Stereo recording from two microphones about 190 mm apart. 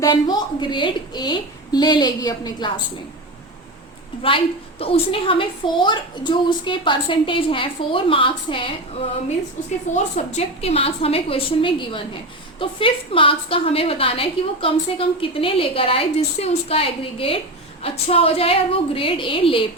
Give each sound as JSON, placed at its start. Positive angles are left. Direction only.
{"t": 0.0, "sound": "a woman's voice", "side_deg": 20}
{"t": 4.8, "sound": "a woman's voice", "side_deg": 30}
{"t": 9.9, "sound": "a woman's voice", "side_deg": 35}